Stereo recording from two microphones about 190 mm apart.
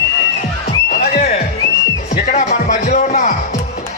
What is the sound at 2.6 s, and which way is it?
Speech, 40° left (ahead or behind).